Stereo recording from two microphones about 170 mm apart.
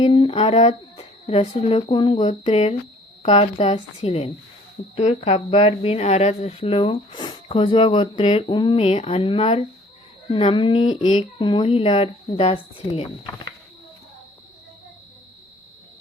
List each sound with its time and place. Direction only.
0.0 s speech: 30° left (ahead or behind)
2.1 s speech: 40° left (ahead or behind)
11.3 s speech: 30° left (ahead or behind)